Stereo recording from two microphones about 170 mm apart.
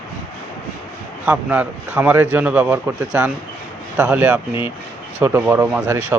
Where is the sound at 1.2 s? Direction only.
10° right (ahead or behind).